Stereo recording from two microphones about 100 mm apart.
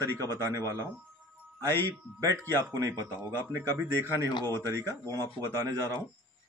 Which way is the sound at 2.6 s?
25° right (ahead or behind).